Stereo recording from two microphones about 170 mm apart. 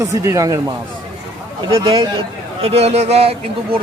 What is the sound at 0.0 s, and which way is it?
Speech, 15° right (ahead or behind).